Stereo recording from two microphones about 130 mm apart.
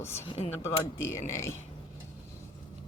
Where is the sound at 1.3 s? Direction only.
20° left (ahead or behind).